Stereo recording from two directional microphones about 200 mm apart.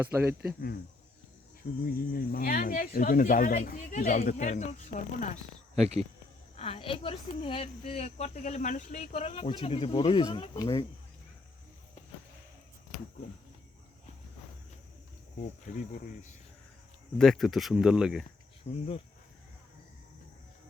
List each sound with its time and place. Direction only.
0.0 s speech: 10° right (ahead or behind)
1.8 s speech: 45° left (ahead or behind)
5.8 s speech: 30° right (ahead or behind)
6.6 s speech: 30° left (ahead or behind)
15.7 s speech: 35° left (ahead or behind)
17.2 s speech: centre (ahead or behind)
18.6 s speech: 30° left (ahead or behind)